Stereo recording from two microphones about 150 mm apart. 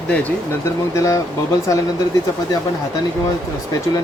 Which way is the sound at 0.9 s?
20° left (ahead or behind).